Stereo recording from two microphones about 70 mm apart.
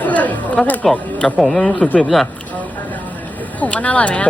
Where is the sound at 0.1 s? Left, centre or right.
Left.